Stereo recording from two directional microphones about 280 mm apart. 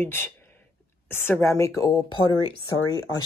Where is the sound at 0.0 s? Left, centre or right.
Centre.